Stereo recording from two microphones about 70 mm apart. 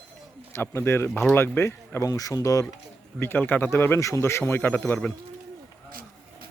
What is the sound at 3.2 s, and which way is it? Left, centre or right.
Speech, left.